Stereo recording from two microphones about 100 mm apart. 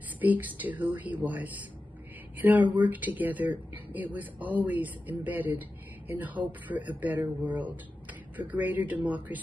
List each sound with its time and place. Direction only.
0.2 s speech: 15° right (ahead or behind)